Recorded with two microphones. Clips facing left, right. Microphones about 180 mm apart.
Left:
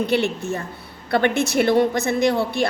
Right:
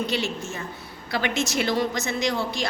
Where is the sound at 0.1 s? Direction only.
60° left (ahead or behind).